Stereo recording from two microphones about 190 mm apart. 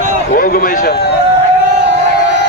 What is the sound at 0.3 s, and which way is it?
Speech, 45° left (ahead or behind).